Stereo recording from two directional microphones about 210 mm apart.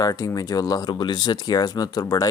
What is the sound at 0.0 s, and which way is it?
Speech, 15° left (ahead or behind).